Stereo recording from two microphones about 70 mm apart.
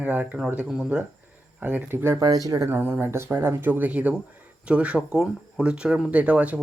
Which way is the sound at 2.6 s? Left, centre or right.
Right.